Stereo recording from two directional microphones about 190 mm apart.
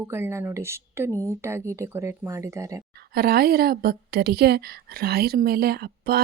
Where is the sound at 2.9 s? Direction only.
55° right (ahead or behind).